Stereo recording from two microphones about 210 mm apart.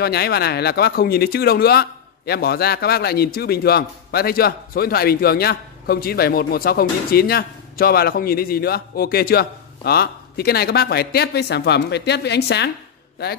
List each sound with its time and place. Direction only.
0.0 s speech: 50° left (ahead or behind)